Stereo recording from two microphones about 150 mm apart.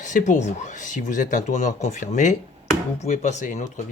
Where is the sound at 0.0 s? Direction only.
55° left (ahead or behind).